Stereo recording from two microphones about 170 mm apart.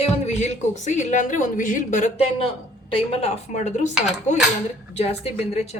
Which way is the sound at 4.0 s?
5° right (ahead or behind).